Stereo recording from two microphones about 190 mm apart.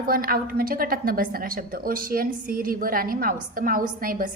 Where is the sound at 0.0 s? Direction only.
50° right (ahead or behind).